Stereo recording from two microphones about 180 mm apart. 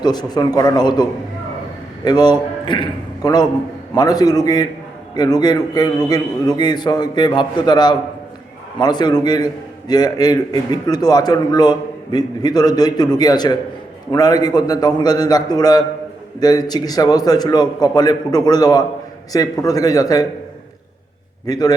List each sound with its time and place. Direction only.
0.0 s a man's voice: 25° left (ahead or behind)
2.0 s a man's voice: 25° left (ahead or behind)
21.4 s a man's voice: 20° left (ahead or behind)